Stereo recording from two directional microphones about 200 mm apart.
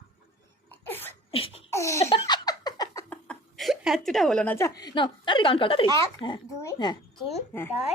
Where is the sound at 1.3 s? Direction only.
30° left (ahead or behind).